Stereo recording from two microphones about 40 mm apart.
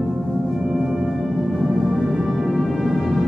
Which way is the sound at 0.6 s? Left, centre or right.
Right.